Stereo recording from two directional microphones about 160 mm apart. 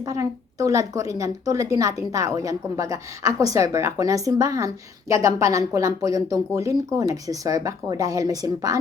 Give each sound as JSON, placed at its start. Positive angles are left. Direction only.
{"t": 0.0, "sound": "a woman's voice", "side_deg": -20}